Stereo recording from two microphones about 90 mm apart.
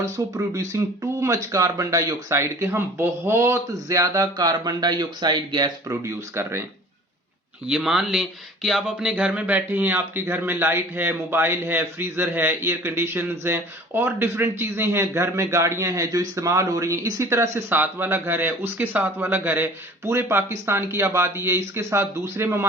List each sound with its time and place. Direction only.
0.0 s speech: 35° right (ahead or behind)
3.7 s speech: 40° right (ahead or behind); by 5.7 s 55° right (ahead or behind)
5.9 s speech: 30° right (ahead or behind)
7.7 s speech: 5° right (ahead or behind); by 22.6 s 25° right (ahead or behind)